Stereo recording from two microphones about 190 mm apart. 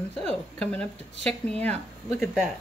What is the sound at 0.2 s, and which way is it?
Speech, 5° left (ahead or behind).